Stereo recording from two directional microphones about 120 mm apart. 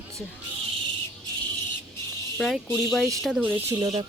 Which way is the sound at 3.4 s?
15° right (ahead or behind).